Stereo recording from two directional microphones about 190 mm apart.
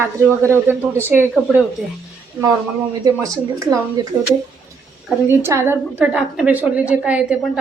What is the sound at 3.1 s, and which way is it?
Speech, 15° right (ahead or behind).